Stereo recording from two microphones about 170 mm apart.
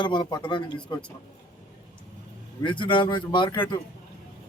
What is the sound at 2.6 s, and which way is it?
Speech, 30° left (ahead or behind).